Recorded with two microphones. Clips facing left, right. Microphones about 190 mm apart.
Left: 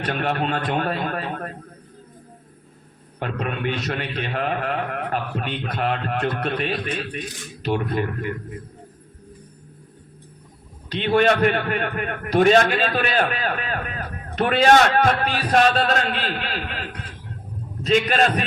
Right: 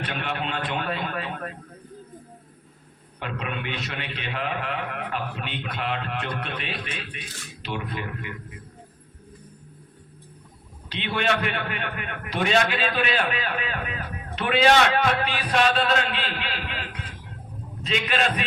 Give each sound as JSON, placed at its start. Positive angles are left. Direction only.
{"t": 0.0, "sound": "a man's voice", "side_deg": 45}
{"t": 3.2, "sound": "a man's voice", "side_deg": 45}
{"t": 10.8, "sound": "a man's voice", "side_deg": 45}